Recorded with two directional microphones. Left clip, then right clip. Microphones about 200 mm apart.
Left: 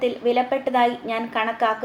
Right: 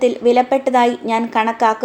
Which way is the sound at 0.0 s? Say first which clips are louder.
Right 7 dB; 50° right (ahead or behind).